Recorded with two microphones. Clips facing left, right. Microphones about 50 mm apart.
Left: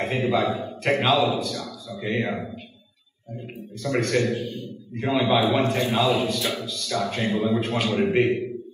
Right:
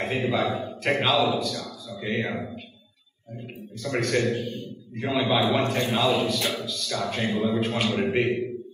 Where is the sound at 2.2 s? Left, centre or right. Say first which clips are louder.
Left 2 dB; centre.